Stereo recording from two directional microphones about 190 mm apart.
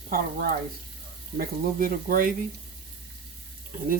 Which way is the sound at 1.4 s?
50° right (ahead or behind).